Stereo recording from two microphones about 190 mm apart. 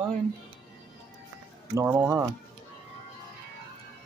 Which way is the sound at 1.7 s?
15° right (ahead or behind).